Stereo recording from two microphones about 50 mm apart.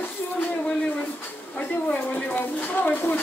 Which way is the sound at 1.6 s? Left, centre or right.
Left.